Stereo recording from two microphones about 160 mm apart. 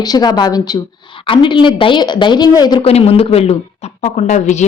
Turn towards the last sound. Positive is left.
turn(degrees=45)  # may be behind; listen again after turning